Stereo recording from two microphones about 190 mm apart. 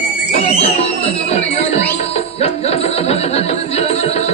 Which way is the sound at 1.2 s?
35° left (ahead or behind).